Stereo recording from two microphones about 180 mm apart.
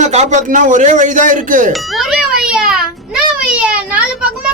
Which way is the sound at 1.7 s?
Centre (ahead or behind).